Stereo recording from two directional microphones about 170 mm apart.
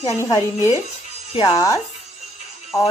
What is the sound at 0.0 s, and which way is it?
Speech, 20° left (ahead or behind).